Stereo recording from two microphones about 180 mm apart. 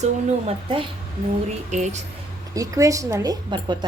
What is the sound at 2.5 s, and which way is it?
A woman's voice, 20° right (ahead or behind).